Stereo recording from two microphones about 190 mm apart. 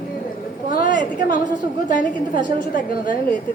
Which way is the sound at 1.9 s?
45° left (ahead or behind).